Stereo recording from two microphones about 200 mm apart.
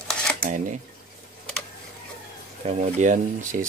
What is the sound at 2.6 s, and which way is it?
Speech, 35° right (ahead or behind).